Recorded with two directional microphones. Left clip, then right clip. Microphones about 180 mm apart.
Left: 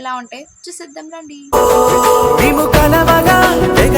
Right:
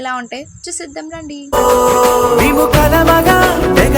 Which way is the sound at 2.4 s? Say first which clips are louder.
Even; centre (ahead or behind).